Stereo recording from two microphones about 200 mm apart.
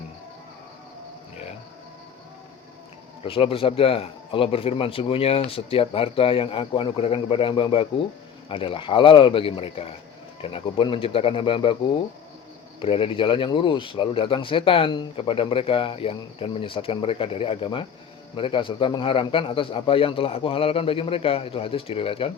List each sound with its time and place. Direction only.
3.2 s speech: 25° left (ahead or behind)
12.8 s speech: 25° left (ahead or behind)